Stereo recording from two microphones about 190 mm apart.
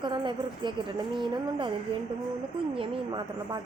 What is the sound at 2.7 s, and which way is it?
Speech, 25° right (ahead or behind).